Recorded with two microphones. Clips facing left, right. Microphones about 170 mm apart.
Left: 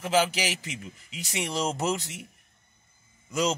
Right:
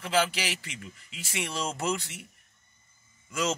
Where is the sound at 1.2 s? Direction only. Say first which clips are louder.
Left 4 dB; 40° left (ahead or behind).